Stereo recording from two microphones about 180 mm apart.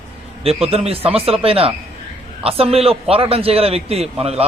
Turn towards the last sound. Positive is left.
turn(degrees=-35)  # may be behind; listen again after turning